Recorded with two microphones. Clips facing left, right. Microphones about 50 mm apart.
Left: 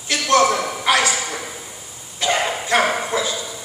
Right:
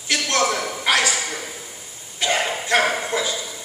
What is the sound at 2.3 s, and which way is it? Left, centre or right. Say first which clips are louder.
Dog: left 1 dB; left.